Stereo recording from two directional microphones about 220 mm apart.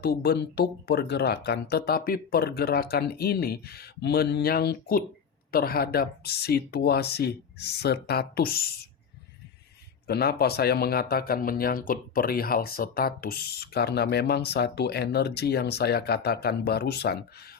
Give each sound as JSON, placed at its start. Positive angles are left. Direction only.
{"t": 0.0, "sound": "speech", "side_deg": 45}
{"t": 10.1, "sound": "speech", "side_deg": 45}